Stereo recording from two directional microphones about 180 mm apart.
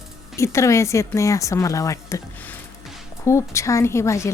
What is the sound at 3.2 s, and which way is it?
A woman's voice, 15° left (ahead or behind).